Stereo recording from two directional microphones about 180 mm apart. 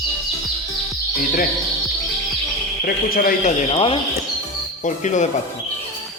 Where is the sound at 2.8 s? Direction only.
55° left (ahead or behind).